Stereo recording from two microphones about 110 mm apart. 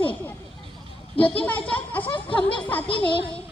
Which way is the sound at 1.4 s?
15° left (ahead or behind).